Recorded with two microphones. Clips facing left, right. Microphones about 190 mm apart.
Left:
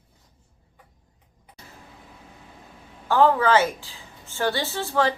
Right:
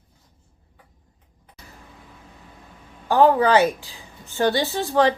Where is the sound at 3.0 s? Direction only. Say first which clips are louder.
Right 3 dB; 15° right (ahead or behind).